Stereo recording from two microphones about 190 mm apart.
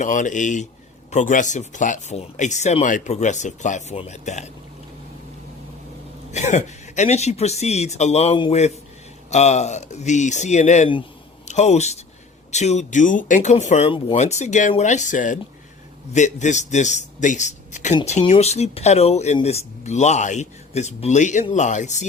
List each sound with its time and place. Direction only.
0.0 s a man's voice: 40° left (ahead or behind)
6.3 s a man's voice: 35° left (ahead or behind)